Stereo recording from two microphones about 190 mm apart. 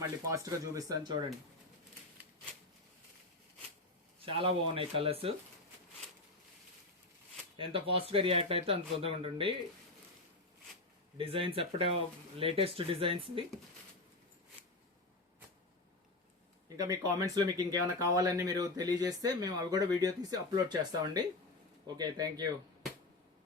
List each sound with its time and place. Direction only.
0.3 s speech: 15° right (ahead or behind)
4.3 s speech: 30° right (ahead or behind)
7.7 s speech: 30° right (ahead or behind)
11.2 s speech: 30° right (ahead or behind)
16.6 s speech: 20° right (ahead or behind)